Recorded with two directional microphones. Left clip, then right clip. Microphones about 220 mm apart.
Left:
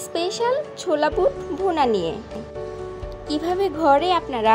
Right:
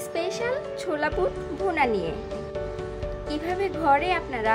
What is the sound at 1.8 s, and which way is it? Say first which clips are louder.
Speech: left 4 dB; 5° right (ahead or behind).